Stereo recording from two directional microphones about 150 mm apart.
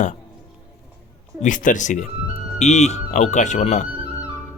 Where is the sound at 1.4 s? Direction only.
60° left (ahead or behind).